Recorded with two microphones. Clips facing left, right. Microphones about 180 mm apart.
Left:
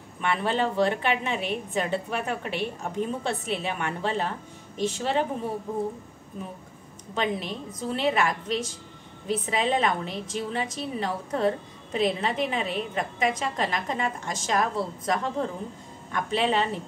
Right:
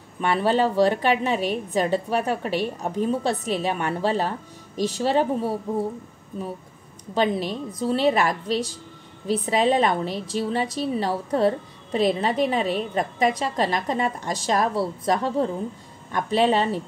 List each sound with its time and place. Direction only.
0.2 s a woman's voice: 35° right (ahead or behind)
7.2 s a woman's voice: 35° right (ahead or behind)